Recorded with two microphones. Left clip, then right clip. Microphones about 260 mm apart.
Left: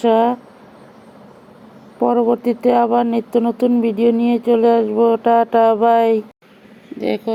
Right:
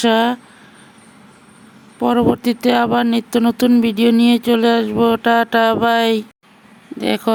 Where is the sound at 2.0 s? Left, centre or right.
Right.